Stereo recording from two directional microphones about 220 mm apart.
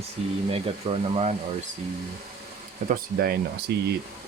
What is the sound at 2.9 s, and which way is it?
Speech, 45° right (ahead or behind).